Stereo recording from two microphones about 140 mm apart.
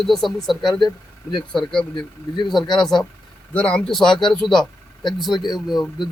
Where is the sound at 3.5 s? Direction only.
10° left (ahead or behind).